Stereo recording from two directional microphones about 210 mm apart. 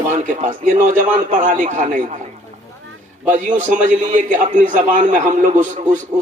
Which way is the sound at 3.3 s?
35° right (ahead or behind).